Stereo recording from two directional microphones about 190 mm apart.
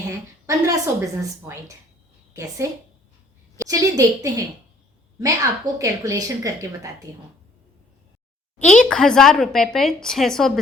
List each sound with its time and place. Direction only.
0.4 s a woman's voice: 15° right (ahead or behind)
3.6 s a woman's voice: 15° right (ahead or behind)
8.5 s a woman's voice: 40° left (ahead or behind)
8.8 s speech: 5° left (ahead or behind)